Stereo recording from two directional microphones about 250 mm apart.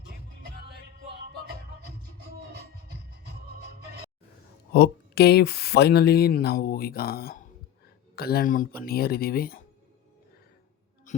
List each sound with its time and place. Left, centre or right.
2.5 s music: right
4.7 s speech: left
11.1 s a sound: left